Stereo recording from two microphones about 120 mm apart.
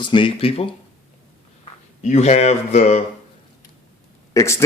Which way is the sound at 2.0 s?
70° left (ahead or behind).